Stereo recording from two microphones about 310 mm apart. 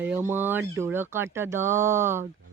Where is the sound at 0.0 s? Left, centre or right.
Centre.